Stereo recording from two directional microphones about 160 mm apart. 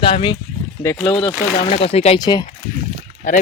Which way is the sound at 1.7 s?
40° left (ahead or behind).